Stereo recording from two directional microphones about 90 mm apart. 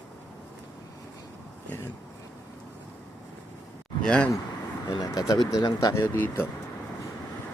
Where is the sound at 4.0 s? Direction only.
10° left (ahead or behind).